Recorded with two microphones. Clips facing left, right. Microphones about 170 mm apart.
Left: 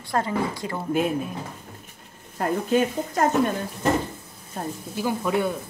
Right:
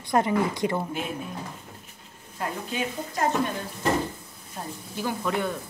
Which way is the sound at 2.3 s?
50° left (ahead or behind).